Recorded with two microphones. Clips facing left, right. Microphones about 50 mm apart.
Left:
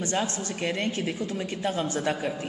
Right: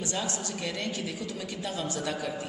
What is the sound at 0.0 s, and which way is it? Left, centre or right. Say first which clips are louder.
A woman's voice: left 4 dB; left.